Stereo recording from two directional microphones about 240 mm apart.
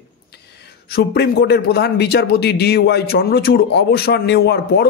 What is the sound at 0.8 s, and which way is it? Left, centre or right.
A man's voice, left.